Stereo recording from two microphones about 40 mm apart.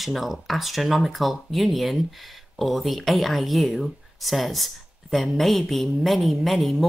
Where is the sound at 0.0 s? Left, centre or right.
Centre.